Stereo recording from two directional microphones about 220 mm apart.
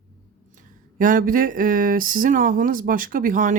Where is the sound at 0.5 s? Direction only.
35° right (ahead or behind).